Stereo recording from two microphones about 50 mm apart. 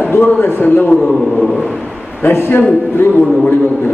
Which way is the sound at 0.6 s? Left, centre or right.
Left.